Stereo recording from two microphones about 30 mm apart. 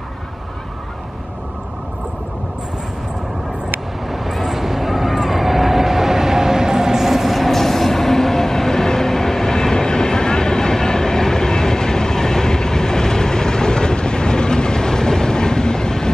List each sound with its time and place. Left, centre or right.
4.1 s vehicle: centre; by 16.1 s left